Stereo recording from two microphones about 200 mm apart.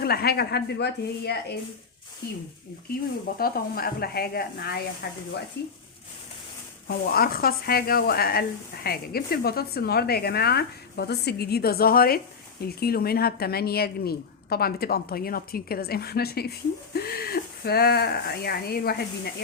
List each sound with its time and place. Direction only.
0.0 s a woman's voice: 50° left (ahead or behind)
3.3 s a woman's voice: 50° left (ahead or behind)
6.8 s a woman's voice: 50° left (ahead or behind)